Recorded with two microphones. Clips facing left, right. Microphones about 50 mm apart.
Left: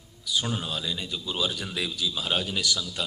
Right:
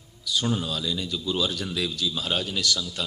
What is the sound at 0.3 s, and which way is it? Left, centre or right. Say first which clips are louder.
A man's voice: right 3 dB; centre.